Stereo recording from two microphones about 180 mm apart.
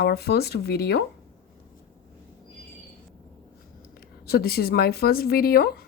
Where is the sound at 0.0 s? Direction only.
65° left (ahead or behind).